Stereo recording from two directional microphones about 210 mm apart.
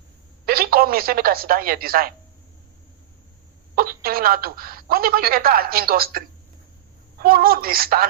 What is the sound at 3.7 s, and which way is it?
A woman's voice, 45° right (ahead or behind).